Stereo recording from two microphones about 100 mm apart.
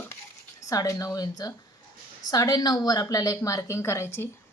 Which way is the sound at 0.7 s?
35° left (ahead or behind).